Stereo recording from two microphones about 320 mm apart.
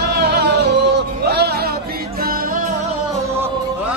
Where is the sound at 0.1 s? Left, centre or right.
Right.